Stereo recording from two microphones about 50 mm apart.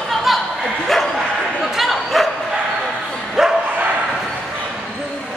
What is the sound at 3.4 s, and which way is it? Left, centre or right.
Dog, centre.